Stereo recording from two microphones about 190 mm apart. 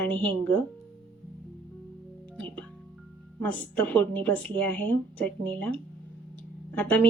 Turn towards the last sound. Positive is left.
turn(degrees=5)  # may be behind; listen again after turning